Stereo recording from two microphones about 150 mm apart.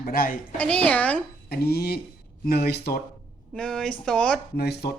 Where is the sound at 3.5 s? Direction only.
5° left (ahead or behind).